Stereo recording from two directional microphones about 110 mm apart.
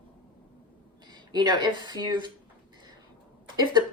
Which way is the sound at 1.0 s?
40° right (ahead or behind).